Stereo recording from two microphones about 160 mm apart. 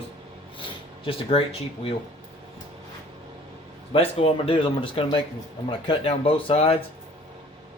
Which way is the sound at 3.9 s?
35° left (ahead or behind).